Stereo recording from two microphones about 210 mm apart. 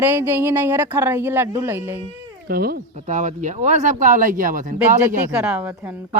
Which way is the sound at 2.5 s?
45° right (ahead or behind).